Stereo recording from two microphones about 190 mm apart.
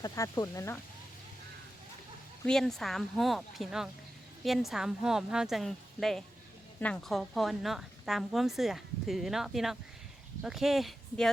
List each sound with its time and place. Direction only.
0.0 s speech: 20° left (ahead or behind)
2.4 s a woman's voice: 5° left (ahead or behind)